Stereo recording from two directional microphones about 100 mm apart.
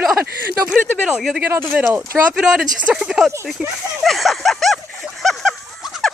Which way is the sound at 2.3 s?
5° right (ahead or behind).